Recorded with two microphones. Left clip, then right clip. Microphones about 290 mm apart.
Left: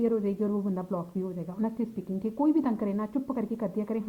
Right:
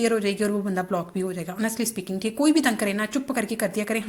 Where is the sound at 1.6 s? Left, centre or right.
Right.